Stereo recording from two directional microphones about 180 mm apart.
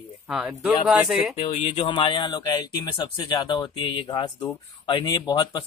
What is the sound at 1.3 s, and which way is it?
Speech, 35° left (ahead or behind).